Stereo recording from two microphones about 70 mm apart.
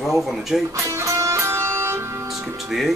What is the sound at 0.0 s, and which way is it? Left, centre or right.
Speech, centre.